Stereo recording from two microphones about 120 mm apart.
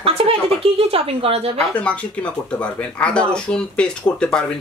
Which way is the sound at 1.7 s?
10° left (ahead or behind).